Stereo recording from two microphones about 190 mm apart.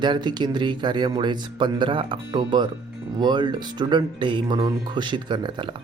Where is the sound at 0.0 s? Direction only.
25° right (ahead or behind).